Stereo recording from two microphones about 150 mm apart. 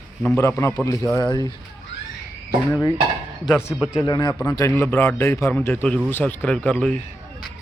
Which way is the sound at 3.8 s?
5° right (ahead or behind).